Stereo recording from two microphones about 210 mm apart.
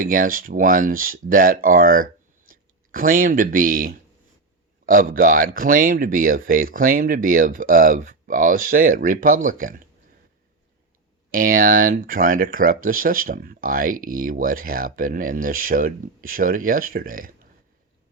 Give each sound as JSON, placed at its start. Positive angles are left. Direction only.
{"t": 0.0, "sound": "speech", "side_deg": -40}
{"t": 11.3, "sound": "speech", "side_deg": -40}